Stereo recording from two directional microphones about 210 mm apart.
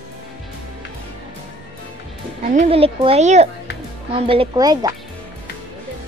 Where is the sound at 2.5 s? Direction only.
30° right (ahead or behind).